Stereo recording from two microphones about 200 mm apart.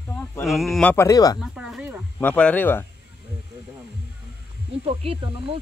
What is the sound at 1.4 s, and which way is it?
Speech, centre (ahead or behind).